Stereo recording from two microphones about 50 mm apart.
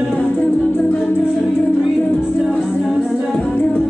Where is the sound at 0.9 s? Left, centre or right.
Left.